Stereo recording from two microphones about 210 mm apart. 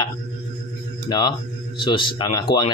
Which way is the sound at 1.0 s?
20° left (ahead or behind).